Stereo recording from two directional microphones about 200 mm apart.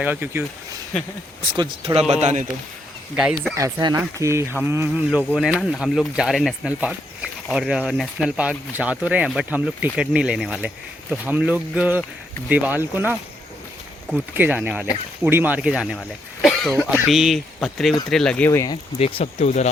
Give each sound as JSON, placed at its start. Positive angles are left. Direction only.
{"t": 0.0, "sound": "speech", "side_deg": -10}
{"t": 1.5, "sound": "speech", "side_deg": -25}
{"t": 3.2, "sound": "speech", "side_deg": -5}
{"t": 3.5, "sound": "speech", "side_deg": -20}
{"t": 5.3, "sound": "speech", "side_deg": 0}
{"t": 18.9, "sound": "speech", "side_deg": 30}